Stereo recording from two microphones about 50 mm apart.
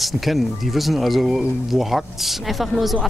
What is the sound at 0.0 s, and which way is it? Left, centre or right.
Speech, centre.